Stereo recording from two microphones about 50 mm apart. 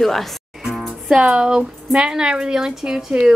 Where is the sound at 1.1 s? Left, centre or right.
Centre.